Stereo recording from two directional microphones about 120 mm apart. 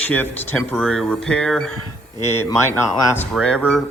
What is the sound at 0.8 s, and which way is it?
Speech, 5° left (ahead or behind).